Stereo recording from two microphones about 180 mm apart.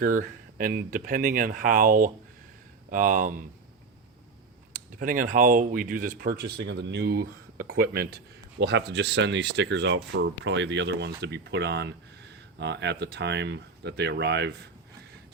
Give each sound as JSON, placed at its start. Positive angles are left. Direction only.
{"t": 0.0, "sound": "speech", "side_deg": -50}
{"t": 4.7, "sound": "speech", "side_deg": -50}